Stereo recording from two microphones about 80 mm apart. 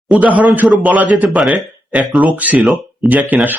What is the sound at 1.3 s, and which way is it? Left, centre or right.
Speech, centre.